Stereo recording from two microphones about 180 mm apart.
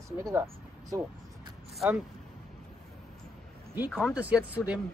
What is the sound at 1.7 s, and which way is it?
Speech, 5° right (ahead or behind).